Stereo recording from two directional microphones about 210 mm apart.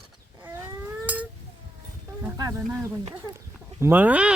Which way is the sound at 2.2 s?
15° right (ahead or behind).